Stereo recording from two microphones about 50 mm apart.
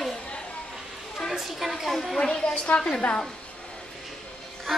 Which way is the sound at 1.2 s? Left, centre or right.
Centre.